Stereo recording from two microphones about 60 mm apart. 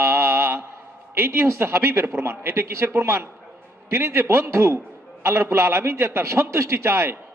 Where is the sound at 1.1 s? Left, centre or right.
Right.